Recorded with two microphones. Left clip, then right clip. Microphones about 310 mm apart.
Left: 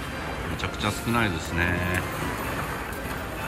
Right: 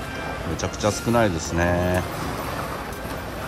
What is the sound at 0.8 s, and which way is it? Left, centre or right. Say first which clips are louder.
Speech: right 6 dB; centre.